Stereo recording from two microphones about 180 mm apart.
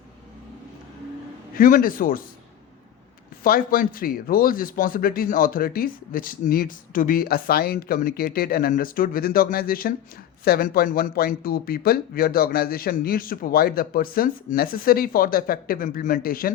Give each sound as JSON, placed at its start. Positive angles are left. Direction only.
{"t": 1.5, "sound": "speech", "side_deg": 50}
{"t": 3.4, "sound": "speech", "side_deg": 55}